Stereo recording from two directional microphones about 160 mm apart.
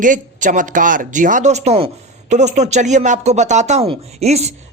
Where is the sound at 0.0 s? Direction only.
55° right (ahead or behind).